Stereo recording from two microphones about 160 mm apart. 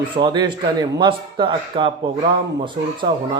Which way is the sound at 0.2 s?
30° right (ahead or behind).